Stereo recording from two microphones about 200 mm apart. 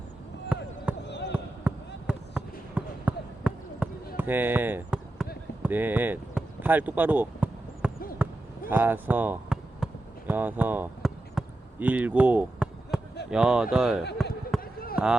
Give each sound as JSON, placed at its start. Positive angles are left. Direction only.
{"t": 0.4, "sound": "basketball bounce", "side_deg": -5}
{"t": 1.0, "sound": "basketball bounce", "side_deg": 60}
{"t": 1.7, "sound": "basketball bounce", "side_deg": -10}
{"t": 5.6, "sound": "a sound", "side_deg": -10}
{"t": 8.7, "sound": "basketball bounce", "side_deg": -10}
{"t": 13.3, "sound": "speech", "side_deg": -5}
{"t": 14.2, "sound": "basketball bounce", "side_deg": 0}
{"t": 14.6, "sound": "basketball bounce", "side_deg": 45}
{"t": 14.9, "sound": "speech", "side_deg": -5}